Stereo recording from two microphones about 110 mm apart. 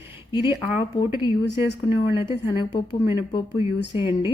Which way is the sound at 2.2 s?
40° left (ahead or behind).